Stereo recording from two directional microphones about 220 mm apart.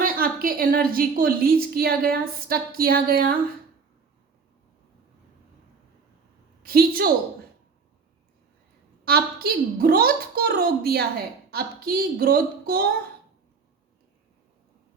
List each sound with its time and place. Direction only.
0.0 s a woman's voice: 40° right (ahead or behind)
6.6 s a woman's voice: 45° right (ahead or behind)
9.0 s a woman's voice: 45° right (ahead or behind)